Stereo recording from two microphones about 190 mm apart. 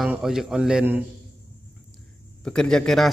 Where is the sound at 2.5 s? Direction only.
5° left (ahead or behind).